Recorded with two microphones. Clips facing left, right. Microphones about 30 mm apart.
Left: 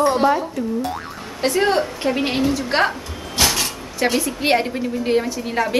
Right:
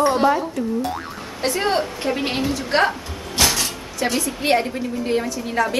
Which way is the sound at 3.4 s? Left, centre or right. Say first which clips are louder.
Even; centre.